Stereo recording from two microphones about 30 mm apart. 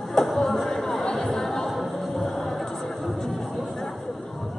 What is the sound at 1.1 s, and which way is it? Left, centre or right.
Chatter, centre.